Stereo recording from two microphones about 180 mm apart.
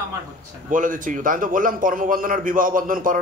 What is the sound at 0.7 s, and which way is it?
A man's voice, 50° right (ahead or behind).